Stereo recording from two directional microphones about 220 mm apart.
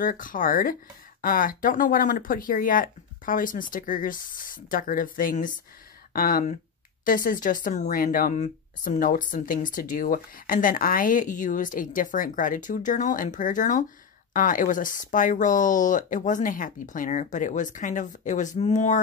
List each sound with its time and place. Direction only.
0.0 s a woman's voice: 40° left (ahead or behind)